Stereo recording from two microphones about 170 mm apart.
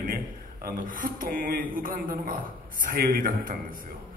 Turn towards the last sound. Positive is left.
turn(degrees=-55)  # may be behind; listen again after turning